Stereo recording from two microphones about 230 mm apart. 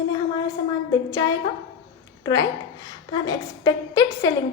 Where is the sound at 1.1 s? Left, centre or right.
Centre.